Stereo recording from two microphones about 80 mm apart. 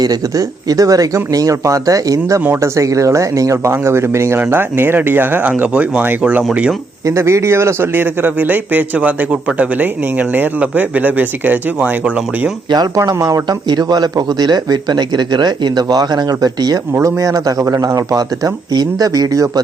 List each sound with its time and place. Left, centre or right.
0.0 s speech: right; by 6.7 s centre
7.0 s speech: right; by 12.5 s centre
13.1 s speech: right
13.7 s speech: right